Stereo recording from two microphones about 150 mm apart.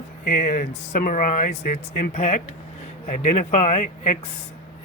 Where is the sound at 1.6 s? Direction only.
70° left (ahead or behind).